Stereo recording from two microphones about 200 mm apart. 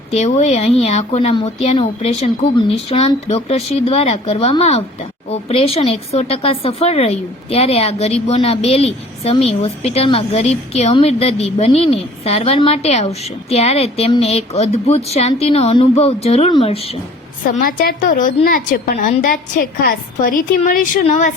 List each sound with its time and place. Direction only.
0.1 s a woman's voice: 35° left (ahead or behind)
17.4 s a woman's voice: 45° left (ahead or behind)